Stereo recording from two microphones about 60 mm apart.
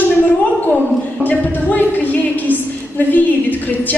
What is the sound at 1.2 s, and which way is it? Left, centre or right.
A woman's voice, left.